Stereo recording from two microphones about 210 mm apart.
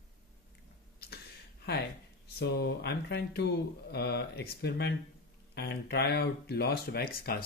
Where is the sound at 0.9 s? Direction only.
50° left (ahead or behind).